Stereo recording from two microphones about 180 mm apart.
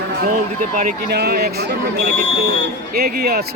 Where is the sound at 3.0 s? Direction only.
55° right (ahead or behind).